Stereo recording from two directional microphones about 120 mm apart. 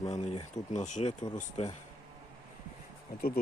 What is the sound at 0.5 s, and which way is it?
Speech, 80° left.